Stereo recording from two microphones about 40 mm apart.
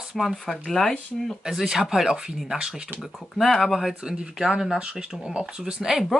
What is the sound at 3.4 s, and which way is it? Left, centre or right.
Speech, centre.